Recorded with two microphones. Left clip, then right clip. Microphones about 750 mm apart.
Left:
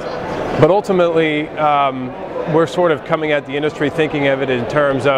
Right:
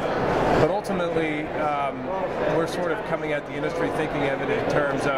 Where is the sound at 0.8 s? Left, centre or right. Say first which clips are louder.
Left 11 dB; left.